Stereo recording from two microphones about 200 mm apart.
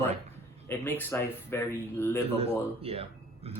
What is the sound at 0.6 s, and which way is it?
Speech, 10° left (ahead or behind).